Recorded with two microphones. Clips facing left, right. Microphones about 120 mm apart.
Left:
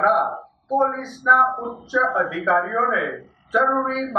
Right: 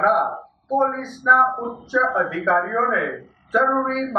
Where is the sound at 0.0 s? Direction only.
Centre (ahead or behind).